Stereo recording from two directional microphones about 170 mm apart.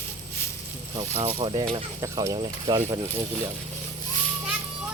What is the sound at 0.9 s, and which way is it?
Speech, 40° right (ahead or behind).